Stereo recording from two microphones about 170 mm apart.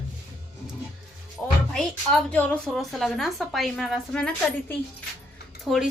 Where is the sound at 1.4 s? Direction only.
Centre (ahead or behind).